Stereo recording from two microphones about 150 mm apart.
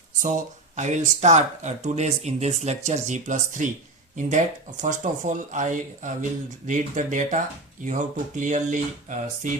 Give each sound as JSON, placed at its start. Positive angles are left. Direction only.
{"t": 0.8, "sound": "speech", "side_deg": -55}